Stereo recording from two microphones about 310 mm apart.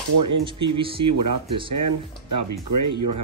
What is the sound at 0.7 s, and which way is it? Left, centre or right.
Speech, centre.